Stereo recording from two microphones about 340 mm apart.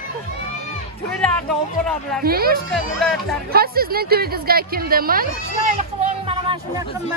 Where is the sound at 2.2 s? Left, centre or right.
Right.